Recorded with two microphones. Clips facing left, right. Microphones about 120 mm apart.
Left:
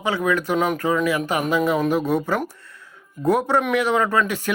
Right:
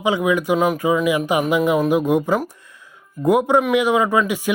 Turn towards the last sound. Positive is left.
turn(degrees=-10)  # may be behind; listen again after turning